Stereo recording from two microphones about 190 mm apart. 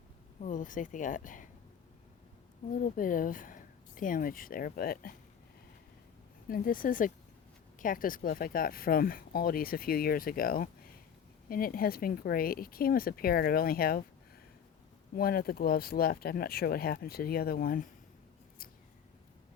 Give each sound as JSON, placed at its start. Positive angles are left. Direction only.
{"t": 0.4, "sound": "speech", "side_deg": 45}
{"t": 2.7, "sound": "speech", "side_deg": 45}
{"t": 6.5, "sound": "speech", "side_deg": 45}
{"t": 15.1, "sound": "speech", "side_deg": 50}